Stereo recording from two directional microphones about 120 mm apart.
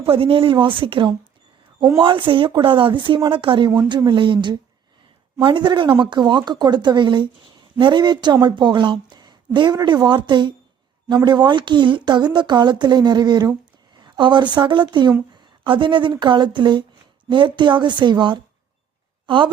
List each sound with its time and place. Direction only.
0.0 s a woman's voice: 50° right (ahead or behind)
15.3 s a sound: 40° right (ahead or behind)
16.1 s a woman's voice: 40° right (ahead or behind)